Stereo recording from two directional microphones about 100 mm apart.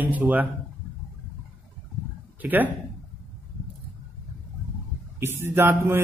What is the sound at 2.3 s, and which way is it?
Speech, 15° right (ahead or behind).